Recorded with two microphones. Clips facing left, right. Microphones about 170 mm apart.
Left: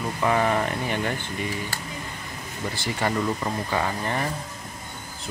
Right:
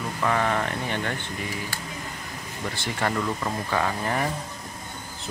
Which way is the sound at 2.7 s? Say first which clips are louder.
Left 1 dB; 5° left (ahead or behind).